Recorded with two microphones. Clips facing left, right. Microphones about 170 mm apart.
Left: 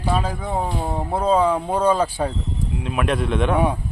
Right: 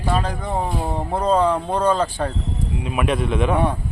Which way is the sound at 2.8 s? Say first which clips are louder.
Even; centre (ahead or behind).